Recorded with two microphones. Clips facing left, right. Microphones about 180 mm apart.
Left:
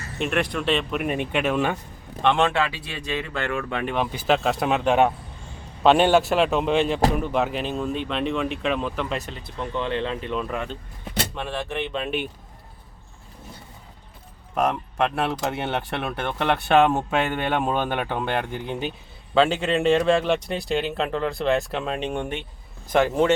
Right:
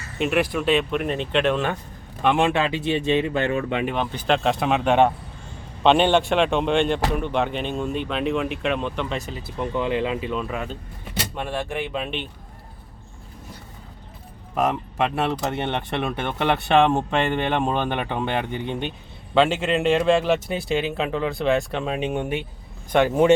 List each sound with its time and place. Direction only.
0.2 s speech: 5° right (ahead or behind)
2.2 s speech: 10° right (ahead or behind)
3.8 s speech: 5° left (ahead or behind)
9.6 s speech: 10° right (ahead or behind)
14.5 s speech: centre (ahead or behind)